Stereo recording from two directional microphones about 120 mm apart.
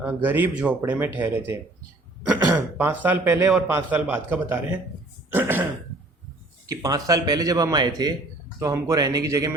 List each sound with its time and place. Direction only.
0.0 s a man's voice: 15° right (ahead or behind)
2.7 s a man's voice: 15° right (ahead or behind)
6.7 s a man's voice: 30° right (ahead or behind)